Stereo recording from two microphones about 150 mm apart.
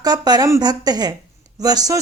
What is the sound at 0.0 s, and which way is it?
A woman's voice, 25° right (ahead or behind).